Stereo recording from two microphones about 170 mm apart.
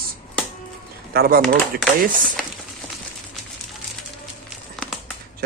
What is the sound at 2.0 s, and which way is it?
Speech, 55° right (ahead or behind).